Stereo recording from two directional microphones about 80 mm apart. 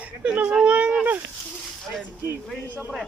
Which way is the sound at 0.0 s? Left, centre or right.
Centre.